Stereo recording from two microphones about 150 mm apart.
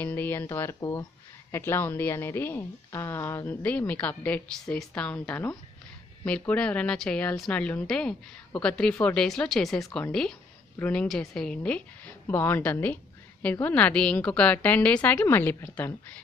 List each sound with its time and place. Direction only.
0.0 s a woman's voice: 15° left (ahead or behind)